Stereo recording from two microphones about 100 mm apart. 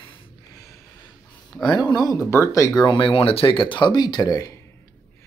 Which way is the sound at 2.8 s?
55° left (ahead or behind).